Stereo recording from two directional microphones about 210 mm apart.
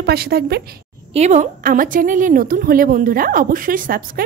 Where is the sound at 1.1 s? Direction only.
30° right (ahead or behind).